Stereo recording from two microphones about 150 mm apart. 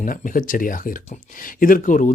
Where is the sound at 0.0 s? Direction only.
60° left (ahead or behind).